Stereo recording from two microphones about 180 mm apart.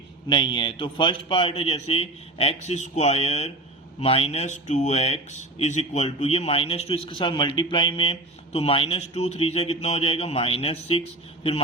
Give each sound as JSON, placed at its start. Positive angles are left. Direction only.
{"t": 0.3, "sound": "a man's voice", "side_deg": 25}